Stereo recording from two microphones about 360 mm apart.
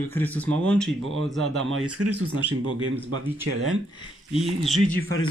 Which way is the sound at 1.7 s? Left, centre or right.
Right.